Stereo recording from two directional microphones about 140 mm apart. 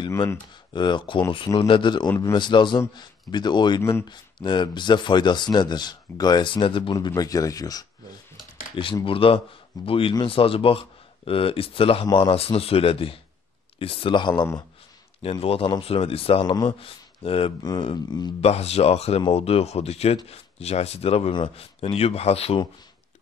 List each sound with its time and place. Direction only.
0.1 s speech: 20° left (ahead or behind)
0.7 s speech: 35° left (ahead or behind)
2.0 s speech: 20° left (ahead or behind)
2.3 s speech: 35° left (ahead or behind)
7.1 s speech: 25° left (ahead or behind)
8.7 s speech: 40° left (ahead or behind)
15.4 s speech: 45° left (ahead or behind)
17.6 s speech: 30° left (ahead or behind)
18.4 s speech: 50° left (ahead or behind)
21.3 s speech: 35° left (ahead or behind)